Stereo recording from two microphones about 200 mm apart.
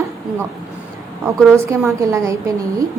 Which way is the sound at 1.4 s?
5° left (ahead or behind).